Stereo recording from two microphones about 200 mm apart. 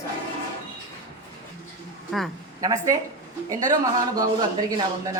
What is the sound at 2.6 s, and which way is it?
Speech, 15° right (ahead or behind).